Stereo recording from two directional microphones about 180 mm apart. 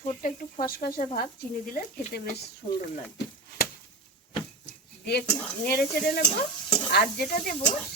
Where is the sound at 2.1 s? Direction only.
65° left (ahead or behind).